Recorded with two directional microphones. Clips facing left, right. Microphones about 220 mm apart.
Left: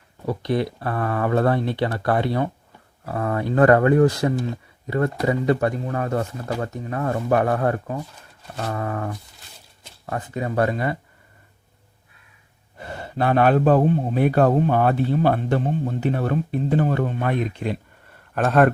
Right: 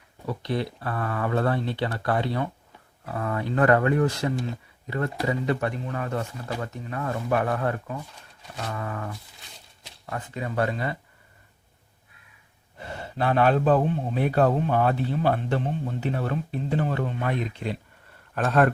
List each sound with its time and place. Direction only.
0.3 s a man's voice: 45° left (ahead or behind)
10.3 s a man's voice: 40° left (ahead or behind)
13.1 s a man's voice: 50° left (ahead or behind)